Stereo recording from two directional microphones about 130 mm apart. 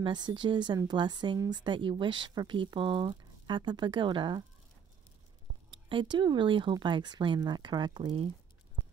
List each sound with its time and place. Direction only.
0.0 s speech: 35° right (ahead or behind)
5.7 s speech: 40° right (ahead or behind)